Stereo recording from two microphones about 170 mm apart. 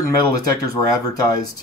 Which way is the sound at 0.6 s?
20° left (ahead or behind).